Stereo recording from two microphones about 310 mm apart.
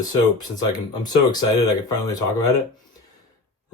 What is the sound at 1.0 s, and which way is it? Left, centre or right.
Speech, centre.